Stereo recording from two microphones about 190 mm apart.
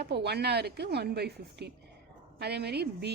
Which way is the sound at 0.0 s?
60° right (ahead or behind).